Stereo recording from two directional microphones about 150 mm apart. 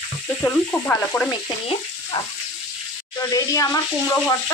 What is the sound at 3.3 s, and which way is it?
Speech, 20° left (ahead or behind).